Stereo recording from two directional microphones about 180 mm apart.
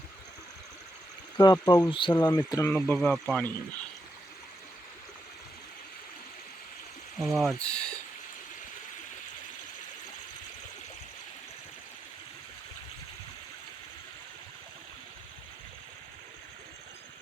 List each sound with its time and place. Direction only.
1.4 s speech: 20° left (ahead or behind)
2.7 s speech: 5° left (ahead or behind)
7.2 s speech: centre (ahead or behind)